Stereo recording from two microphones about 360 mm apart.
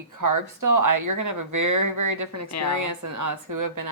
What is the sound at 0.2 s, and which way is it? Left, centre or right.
A woman's voice, right.